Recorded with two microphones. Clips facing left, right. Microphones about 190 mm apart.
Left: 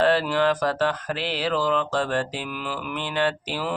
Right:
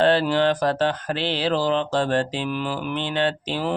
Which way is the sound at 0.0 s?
25° right (ahead or behind).